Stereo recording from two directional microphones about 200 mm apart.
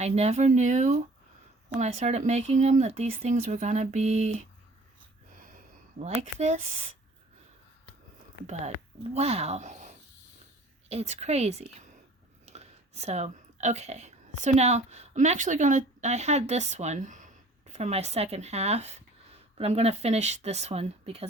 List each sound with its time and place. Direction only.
0.0 s speech: 30° right (ahead or behind)
6.0 s speech: 35° right (ahead or behind)
9.1 s speech: 30° right (ahead or behind)